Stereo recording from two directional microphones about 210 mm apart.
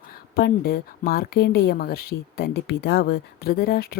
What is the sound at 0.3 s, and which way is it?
Speech, 45° left (ahead or behind).